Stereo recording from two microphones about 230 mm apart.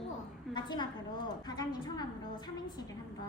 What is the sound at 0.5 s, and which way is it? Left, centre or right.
A woman's voice, centre.